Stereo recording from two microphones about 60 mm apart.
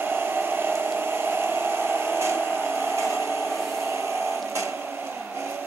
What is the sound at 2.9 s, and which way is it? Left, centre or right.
Hair dryer, right.